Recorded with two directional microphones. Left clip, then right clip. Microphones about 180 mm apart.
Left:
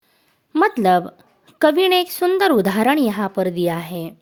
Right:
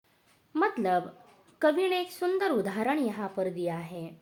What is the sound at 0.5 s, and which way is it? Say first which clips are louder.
A woman's voice: left 11 dB; 65° left (ahead or behind).